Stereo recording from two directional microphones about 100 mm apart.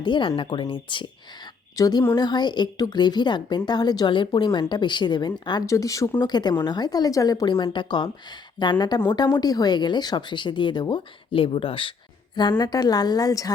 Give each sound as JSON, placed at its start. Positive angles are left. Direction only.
{"t": 0.0, "sound": "speech", "side_deg": 55}
{"t": 1.7, "sound": "a woman's voice", "side_deg": 40}
{"t": 5.6, "sound": "a woman's voice", "side_deg": 30}
{"t": 6.2, "sound": "a woman's voice", "side_deg": 45}
{"t": 7.5, "sound": "speech", "side_deg": 55}
{"t": 12.4, "sound": "a woman's voice", "side_deg": 45}